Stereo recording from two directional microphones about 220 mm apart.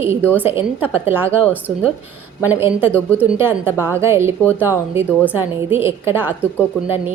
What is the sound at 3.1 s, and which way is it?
A woman's voice, 10° right (ahead or behind).